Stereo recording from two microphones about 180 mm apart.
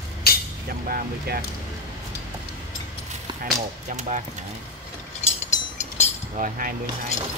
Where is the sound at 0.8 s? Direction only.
50° right (ahead or behind).